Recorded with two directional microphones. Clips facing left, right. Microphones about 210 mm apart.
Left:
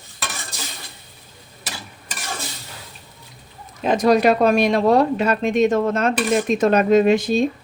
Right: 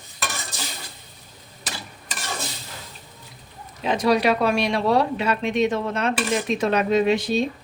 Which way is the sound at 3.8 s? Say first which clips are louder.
Left 4 dB; 45° left (ahead or behind).